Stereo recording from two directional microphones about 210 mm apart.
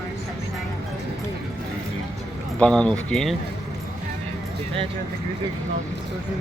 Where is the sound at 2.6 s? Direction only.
5° left (ahead or behind).